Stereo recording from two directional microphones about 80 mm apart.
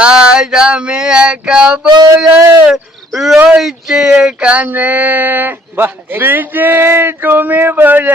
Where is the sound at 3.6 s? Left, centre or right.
Centre.